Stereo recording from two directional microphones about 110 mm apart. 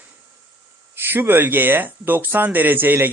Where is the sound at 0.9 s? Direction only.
20° right (ahead or behind).